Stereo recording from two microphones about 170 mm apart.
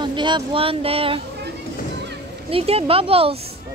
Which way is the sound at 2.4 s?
35° right (ahead or behind).